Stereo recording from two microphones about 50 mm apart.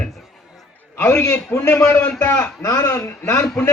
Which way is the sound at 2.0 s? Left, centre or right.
Left.